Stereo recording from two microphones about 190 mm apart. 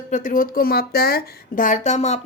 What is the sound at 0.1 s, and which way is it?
Speech, 45° left (ahead or behind).